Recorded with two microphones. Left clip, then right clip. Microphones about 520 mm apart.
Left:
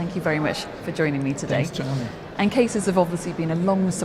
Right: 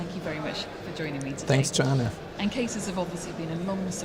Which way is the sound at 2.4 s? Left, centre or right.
Left.